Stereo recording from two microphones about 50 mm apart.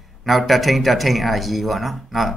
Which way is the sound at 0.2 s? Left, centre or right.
Centre.